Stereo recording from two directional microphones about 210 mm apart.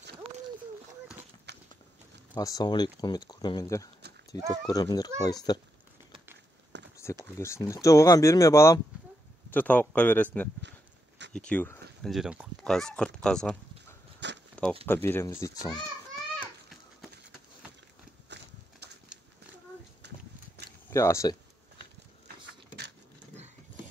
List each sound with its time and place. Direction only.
1.5 s walk: 55° right (ahead or behind)
2.3 s speech: 20° left (ahead or behind)
7.0 s speech: 15° left (ahead or behind)
12.0 s speech: centre (ahead or behind)
14.5 s a sound: 5° left (ahead or behind)
15.0 s speech: 10° left (ahead or behind)
20.0 s horse: 55° right (ahead or behind)
20.9 s speech: 15° left (ahead or behind)